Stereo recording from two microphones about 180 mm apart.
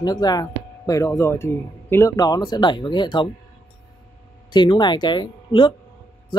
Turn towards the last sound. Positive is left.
turn(degrees=25)  # may be behind; listen again after turning